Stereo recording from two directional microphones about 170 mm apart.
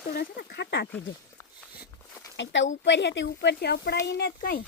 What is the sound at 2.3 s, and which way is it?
Speech, 90° left.